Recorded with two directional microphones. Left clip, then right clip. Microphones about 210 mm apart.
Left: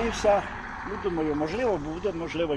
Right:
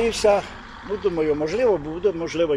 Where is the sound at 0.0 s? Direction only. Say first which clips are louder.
Right 5 dB; 50° right (ahead or behind).